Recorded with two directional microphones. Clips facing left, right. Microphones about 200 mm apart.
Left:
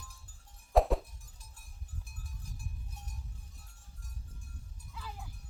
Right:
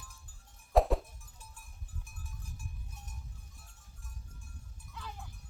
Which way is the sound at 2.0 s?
35° left (ahead or behind).